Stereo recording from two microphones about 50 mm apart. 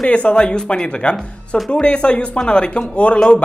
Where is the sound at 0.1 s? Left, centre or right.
Left.